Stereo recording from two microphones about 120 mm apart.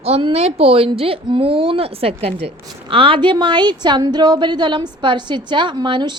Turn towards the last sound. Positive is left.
turn(degrees=-40)  # may be behind; listen again after turning